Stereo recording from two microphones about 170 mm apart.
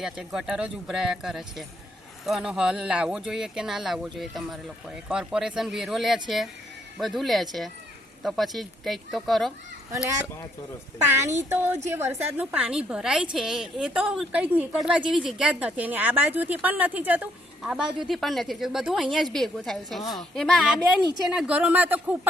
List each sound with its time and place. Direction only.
0.0 s a woman's voice: 5° right (ahead or behind)
11.4 s a woman's voice: 10° right (ahead or behind)